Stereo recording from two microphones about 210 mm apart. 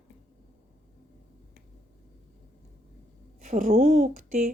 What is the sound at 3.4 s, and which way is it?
A woman's voice, 35° right (ahead or behind).